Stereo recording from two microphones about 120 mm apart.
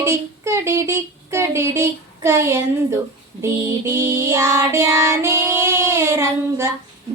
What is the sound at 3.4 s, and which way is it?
Child singing, 25° right (ahead or behind).